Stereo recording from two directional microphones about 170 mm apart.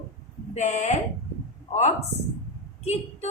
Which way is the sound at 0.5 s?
40° left (ahead or behind).